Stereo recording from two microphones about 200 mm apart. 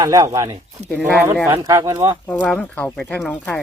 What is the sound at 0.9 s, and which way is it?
Speech, 5° right (ahead or behind).